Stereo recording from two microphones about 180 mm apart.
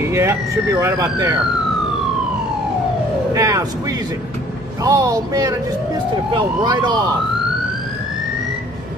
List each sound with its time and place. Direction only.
0.1 s speech: 15° right (ahead or behind)
3.3 s speech: 20° right (ahead or behind)